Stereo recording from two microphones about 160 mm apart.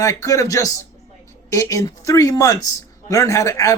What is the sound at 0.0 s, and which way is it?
A man's voice, 20° left (ahead or behind).